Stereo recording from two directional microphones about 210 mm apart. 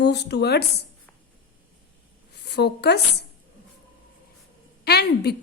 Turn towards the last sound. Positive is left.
turn(degrees=50)  # may be behind; listen again after turning